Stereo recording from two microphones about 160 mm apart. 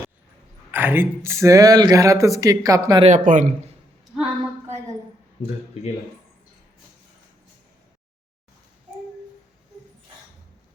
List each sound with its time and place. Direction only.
0.7 s speech: 15° right (ahead or behind)
3.0 s speech: 50° right (ahead or behind)